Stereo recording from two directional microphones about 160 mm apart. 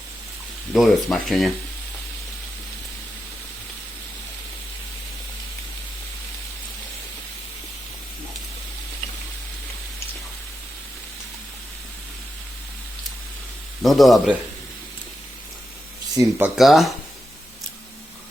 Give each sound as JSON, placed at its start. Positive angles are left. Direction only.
{"t": 0.7, "sound": "speech", "side_deg": 0}
{"t": 13.8, "sound": "speech", "side_deg": 0}
{"t": 16.1, "sound": "speech", "side_deg": -20}
{"t": 16.6, "sound": "speech", "side_deg": 0}